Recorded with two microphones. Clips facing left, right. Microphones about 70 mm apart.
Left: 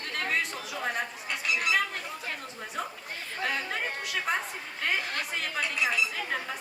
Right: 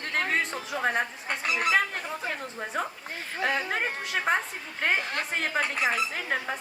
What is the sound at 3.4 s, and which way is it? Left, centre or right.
A woman's voice, right.